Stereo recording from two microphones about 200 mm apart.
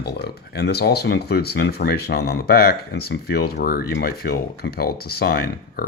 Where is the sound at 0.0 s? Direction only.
55° left (ahead or behind).